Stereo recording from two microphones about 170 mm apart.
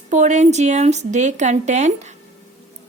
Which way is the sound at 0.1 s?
45° right (ahead or behind).